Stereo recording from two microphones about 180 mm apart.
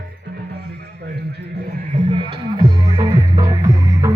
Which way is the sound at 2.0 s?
30° right (ahead or behind).